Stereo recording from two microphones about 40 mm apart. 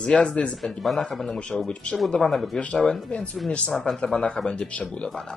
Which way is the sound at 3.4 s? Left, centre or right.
Left.